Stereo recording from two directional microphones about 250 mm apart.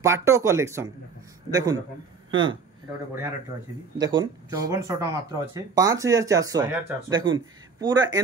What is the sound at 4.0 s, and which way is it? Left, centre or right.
Speech, centre.